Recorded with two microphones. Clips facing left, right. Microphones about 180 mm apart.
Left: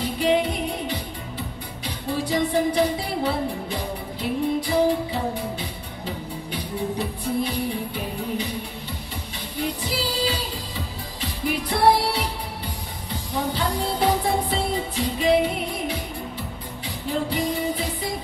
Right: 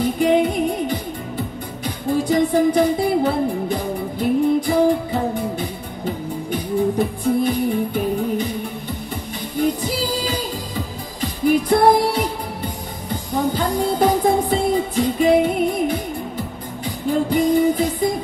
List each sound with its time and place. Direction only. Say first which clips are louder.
0.0 s music: right 5 dB; 50° right (ahead or behind)
2.0 s music: right 6 dB; 45° right (ahead or behind)
9.6 s music: right 7 dB; 45° right (ahead or behind)